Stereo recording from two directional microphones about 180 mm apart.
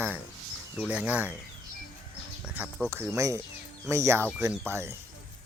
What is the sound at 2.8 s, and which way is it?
Speech, 15° right (ahead or behind).